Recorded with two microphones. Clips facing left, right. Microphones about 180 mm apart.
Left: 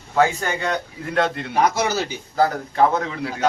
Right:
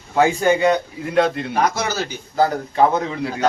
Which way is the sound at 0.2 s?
15° right (ahead or behind).